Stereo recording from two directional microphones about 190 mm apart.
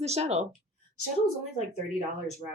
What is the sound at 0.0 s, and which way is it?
Speech, 35° right (ahead or behind).